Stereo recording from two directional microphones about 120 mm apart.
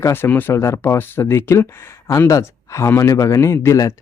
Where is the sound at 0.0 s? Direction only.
20° left (ahead or behind).